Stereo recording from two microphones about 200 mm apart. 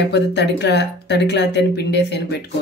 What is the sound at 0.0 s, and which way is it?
Speech, 55° left (ahead or behind).